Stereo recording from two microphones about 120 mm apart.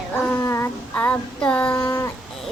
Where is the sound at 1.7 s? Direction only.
30° left (ahead or behind).